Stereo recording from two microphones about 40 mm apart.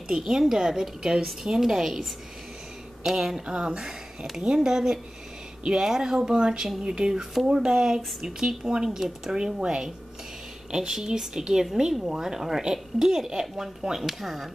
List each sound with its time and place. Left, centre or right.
0.1 s a woman's voice: centre
3.4 s a woman's voice: right; by 14.5 s centre